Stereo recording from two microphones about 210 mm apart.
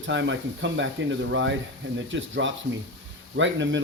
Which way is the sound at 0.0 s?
60° right (ahead or behind).